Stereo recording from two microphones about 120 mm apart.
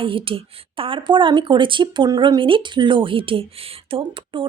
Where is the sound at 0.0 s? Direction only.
45° right (ahead or behind).